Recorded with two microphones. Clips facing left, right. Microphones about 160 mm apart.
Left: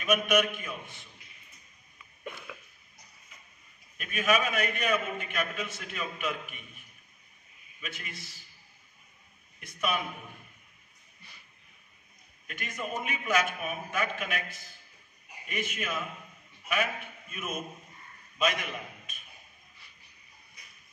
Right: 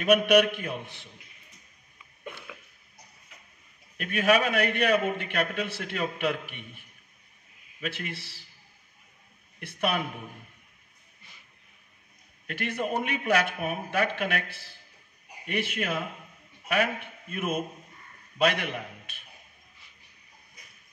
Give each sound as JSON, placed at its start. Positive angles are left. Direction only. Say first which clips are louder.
{"t": 0.0, "sound": "a man's voice", "louder": "right 6 dB", "side_deg": -65}
{"t": 2.2, "sound": "a sound", "louder": "even", "side_deg": -5}
{"t": 4.0, "sound": "a man's voice", "louder": "right 4 dB", "side_deg": -65}
{"t": 7.8, "sound": "a man's voice", "louder": "right 8 dB", "side_deg": -65}
{"t": 9.6, "sound": "speech", "louder": "right 3 dB", "side_deg": -65}
{"t": 12.4, "sound": "a man's voice", "louder": "right 7 dB", "side_deg": -70}